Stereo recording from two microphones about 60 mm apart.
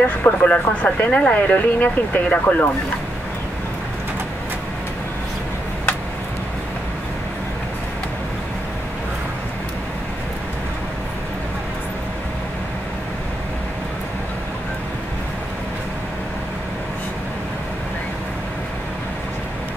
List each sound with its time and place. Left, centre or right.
0.0 s speech: left